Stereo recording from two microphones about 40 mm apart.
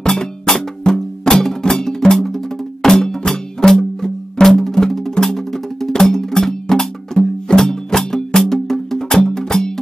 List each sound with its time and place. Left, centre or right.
0.0 s cowbell: centre
5.1 s music: centre